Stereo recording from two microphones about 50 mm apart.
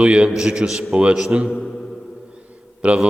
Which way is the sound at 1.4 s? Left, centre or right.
Centre.